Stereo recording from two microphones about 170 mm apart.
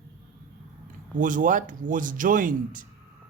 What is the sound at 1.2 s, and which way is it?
Speech, 50° right (ahead or behind).